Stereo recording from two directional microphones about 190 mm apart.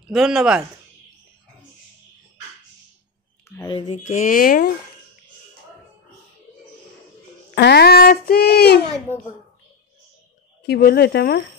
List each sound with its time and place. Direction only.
0.0 s speech: centre (ahead or behind)
3.4 s speech: 15° left (ahead or behind)
3.7 s speech: 30° left (ahead or behind)
4.0 s speech: 40° left (ahead or behind)
7.5 s a child's voice: 60° left (ahead or behind)
10.7 s a child's voice: 55° left (ahead or behind)